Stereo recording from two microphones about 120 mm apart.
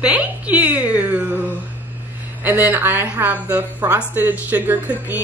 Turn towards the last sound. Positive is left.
turn(degrees=-15)  # may be behind; listen again after turning